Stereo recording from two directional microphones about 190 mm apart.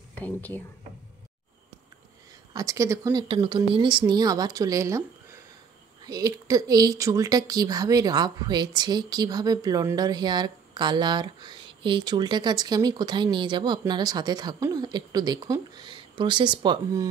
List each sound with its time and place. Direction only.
0.1 s speech: 10° left (ahead or behind)
2.5 s speech: 15° right (ahead or behind)
6.0 s speech: 20° right (ahead or behind)